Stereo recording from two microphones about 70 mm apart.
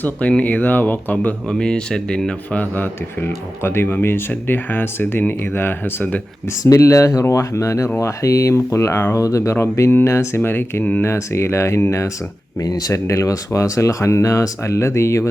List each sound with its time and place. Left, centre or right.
0.0 s speech: centre
1.5 s speech: centre
2.6 s speech: left
6.6 s speech: left
9.1 s speech: left
9.6 s speech: left
12.5 s speech: left
12.9 s speech: left